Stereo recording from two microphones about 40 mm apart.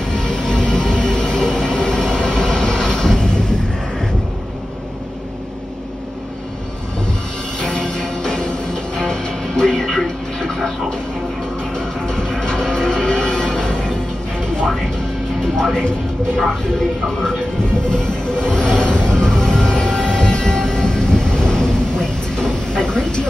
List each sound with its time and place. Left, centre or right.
0.1 s music: centre
1.8 s vehicle: centre
7.6 s music: centre
15.5 s music: centre
17.8 s music: centre
19.2 s music: centre
19.7 s train: centre
22.8 s a sound: centre